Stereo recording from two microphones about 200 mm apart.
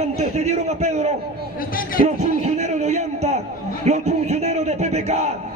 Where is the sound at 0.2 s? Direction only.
35° right (ahead or behind).